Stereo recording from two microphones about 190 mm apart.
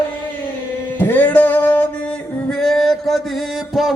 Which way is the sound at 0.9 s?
10° left (ahead or behind).